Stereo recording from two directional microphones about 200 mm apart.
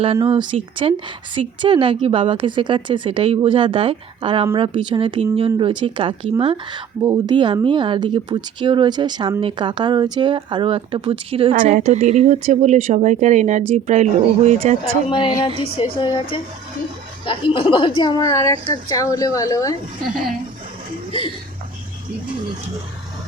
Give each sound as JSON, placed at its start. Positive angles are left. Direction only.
{"t": 0.3, "sound": "a woman's voice", "side_deg": -25}
{"t": 15.1, "sound": "a woman's voice", "side_deg": 25}
{"t": 21.1, "sound": "speech", "side_deg": 25}